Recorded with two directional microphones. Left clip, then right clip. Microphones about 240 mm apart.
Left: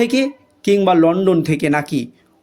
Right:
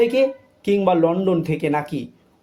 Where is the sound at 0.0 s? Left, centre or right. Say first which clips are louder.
Right 1 dB; left.